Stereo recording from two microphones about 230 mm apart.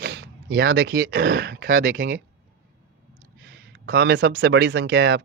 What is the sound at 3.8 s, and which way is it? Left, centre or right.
Speech, right.